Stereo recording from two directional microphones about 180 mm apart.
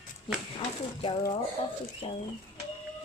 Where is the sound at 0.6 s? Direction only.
25° left (ahead or behind).